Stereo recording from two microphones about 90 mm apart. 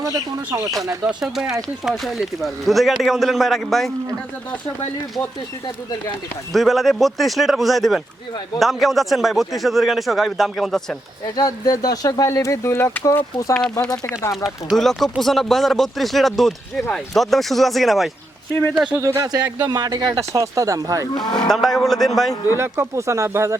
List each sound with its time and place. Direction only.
0.0 s speech: 40° right (ahead or behind)
1.0 s speech: 5° right (ahead or behind)
6.5 s speech: centre (ahead or behind)
11.3 s speech: 45° left (ahead or behind); by 13.0 s 25° left (ahead or behind)
13.5 s speech: 5° left (ahead or behind)
14.1 s speech: 35° left (ahead or behind)
14.4 s speech: centre (ahead or behind)
19.0 s speech: 35° right (ahead or behind)
20.1 s speech: 35° right (ahead or behind)
21.3 s speech: 5° left (ahead or behind)
22.5 s speech: 30° right (ahead or behind)